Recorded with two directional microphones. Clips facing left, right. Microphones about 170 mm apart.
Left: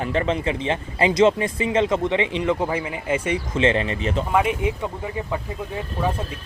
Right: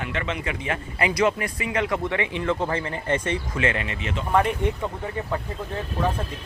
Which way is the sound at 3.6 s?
30° left (ahead or behind).